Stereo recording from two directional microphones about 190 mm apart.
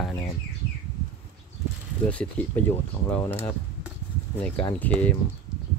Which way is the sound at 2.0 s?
10° left (ahead or behind).